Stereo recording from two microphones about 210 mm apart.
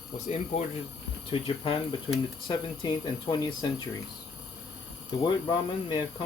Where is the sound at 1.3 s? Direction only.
25° left (ahead or behind).